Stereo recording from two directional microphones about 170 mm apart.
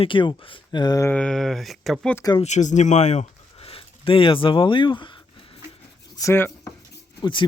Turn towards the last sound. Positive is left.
turn(degrees=30)  # may be behind; listen again after turning